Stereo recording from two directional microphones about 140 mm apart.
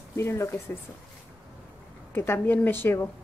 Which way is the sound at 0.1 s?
20° left (ahead or behind).